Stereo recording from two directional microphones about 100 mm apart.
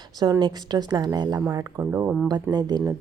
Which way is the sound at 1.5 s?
35° right (ahead or behind).